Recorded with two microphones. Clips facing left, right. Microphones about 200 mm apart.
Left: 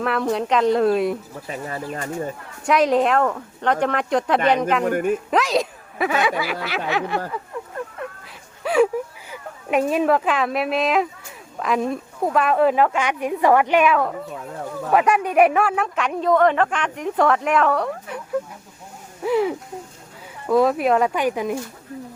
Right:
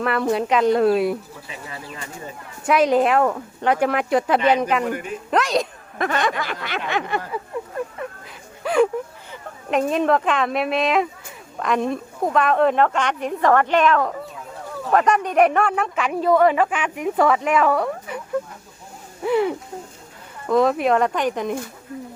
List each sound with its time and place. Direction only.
0.0 s speech: centre (ahead or behind)
1.5 s speech: 45° left (ahead or behind)
2.6 s speech: centre (ahead or behind)
4.8 s speech: 50° left (ahead or behind)
5.3 s speech: centre (ahead or behind)
8.6 s a sound: centre (ahead or behind)
9.3 s speech: 5° left (ahead or behind)